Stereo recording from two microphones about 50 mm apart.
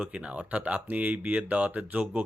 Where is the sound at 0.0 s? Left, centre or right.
Right.